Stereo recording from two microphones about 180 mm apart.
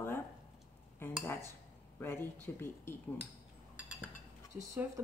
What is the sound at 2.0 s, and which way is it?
Speech, 10° left (ahead or behind).